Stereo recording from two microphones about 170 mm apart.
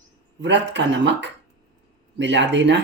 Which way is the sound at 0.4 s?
90° right.